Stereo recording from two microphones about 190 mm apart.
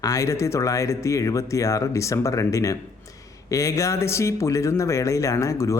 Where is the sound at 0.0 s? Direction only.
15° left (ahead or behind).